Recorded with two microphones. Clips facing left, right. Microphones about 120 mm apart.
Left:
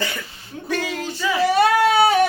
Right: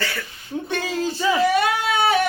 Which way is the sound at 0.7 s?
30° right (ahead or behind).